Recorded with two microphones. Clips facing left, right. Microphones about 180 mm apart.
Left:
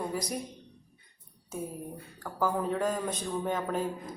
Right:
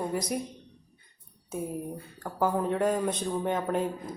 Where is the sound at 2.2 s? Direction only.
20° right (ahead or behind).